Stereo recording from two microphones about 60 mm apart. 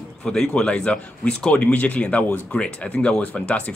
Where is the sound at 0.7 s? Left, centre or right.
Centre.